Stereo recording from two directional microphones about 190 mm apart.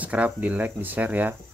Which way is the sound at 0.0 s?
10° right (ahead or behind).